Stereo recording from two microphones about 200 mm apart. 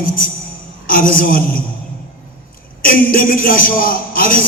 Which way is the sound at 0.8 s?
45° left (ahead or behind).